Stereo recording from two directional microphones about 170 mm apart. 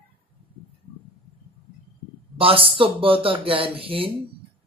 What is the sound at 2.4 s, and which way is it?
Speech, 30° right (ahead or behind).